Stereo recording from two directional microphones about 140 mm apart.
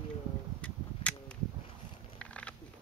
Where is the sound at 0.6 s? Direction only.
10° left (ahead or behind).